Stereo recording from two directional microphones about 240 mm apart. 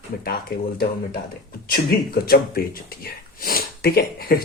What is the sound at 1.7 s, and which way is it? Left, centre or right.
Speech, left.